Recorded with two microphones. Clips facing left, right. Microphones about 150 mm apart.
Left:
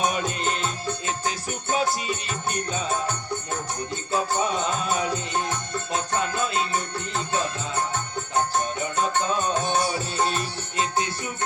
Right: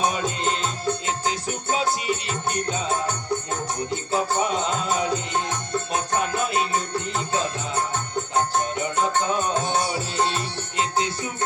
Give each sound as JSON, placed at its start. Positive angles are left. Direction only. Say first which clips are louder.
{"t": 0.0, "sound": "music", "louder": "right 1 dB", "side_deg": -25}
{"t": 4.1, "sound": "music", "louder": "right 1 dB", "side_deg": -20}
{"t": 9.0, "sound": "music", "louder": "right 1 dB", "side_deg": -20}